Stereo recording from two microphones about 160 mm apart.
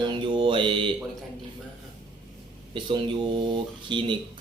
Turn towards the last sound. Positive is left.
turn(degrees=-30)  # may be behind; listen again after turning